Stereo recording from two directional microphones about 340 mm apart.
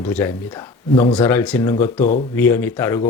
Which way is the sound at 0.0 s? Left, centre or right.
Centre.